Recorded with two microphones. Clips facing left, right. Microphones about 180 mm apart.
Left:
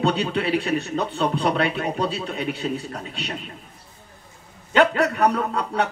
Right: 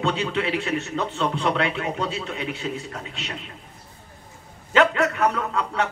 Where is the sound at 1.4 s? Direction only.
40° left (ahead or behind).